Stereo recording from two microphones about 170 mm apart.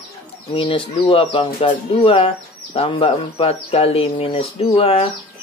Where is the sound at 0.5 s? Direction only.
30° left (ahead or behind).